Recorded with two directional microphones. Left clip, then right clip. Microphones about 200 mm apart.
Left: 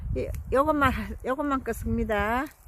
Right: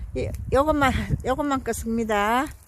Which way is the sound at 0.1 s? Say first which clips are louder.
Right 3 dB; 10° right (ahead or behind).